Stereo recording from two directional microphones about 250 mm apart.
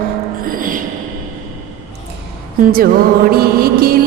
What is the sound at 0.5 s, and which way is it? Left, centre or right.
Music, right.